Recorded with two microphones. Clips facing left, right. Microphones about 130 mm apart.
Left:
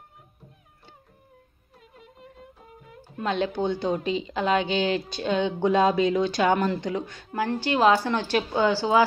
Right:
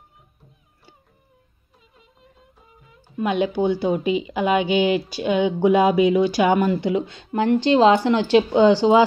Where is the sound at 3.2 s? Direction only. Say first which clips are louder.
Right 5 dB; 10° right (ahead or behind).